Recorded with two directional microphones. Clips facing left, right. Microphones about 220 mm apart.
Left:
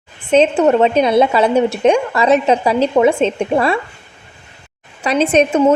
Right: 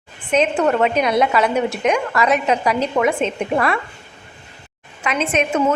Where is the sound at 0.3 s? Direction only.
25° left (ahead or behind).